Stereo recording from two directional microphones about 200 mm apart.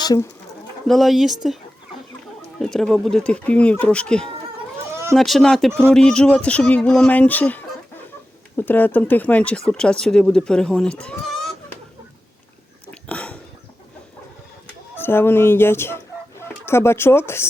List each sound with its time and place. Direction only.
0.0 s speech: 20° left (ahead or behind)
0.9 s speech: centre (ahead or behind)
2.6 s speech: 5° left (ahead or behind)
11.0 s a sound: 5° left (ahead or behind)
12.9 s a sound: 5° left (ahead or behind)
14.9 s speech: 10° left (ahead or behind)